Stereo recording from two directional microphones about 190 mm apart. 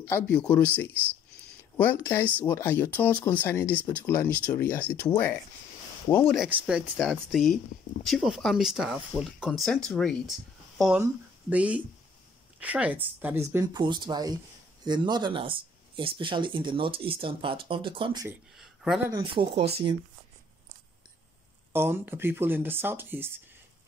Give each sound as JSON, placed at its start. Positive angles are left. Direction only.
{"t": 0.1, "sound": "speech", "side_deg": 10}
{"t": 1.8, "sound": "speech", "side_deg": 10}
{"t": 6.3, "sound": "speech", "side_deg": 0}
{"t": 18.6, "sound": "a sound", "side_deg": 0}
{"t": 19.0, "sound": "speech", "side_deg": -25}
{"t": 21.7, "sound": "speech", "side_deg": -10}